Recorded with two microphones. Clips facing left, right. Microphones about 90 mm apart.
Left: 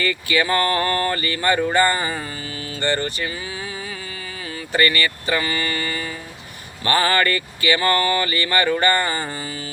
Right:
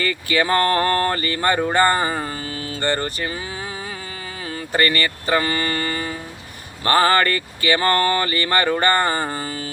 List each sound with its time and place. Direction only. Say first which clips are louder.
0.0 s speech: even; 35° right (ahead or behind)
4.7 s speech: even; 35° right (ahead or behind)